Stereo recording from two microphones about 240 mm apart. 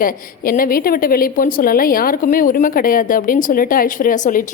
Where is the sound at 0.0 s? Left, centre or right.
Left.